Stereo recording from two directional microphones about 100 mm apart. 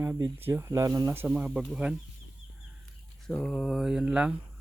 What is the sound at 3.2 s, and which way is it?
Mantra, 5° left (ahead or behind).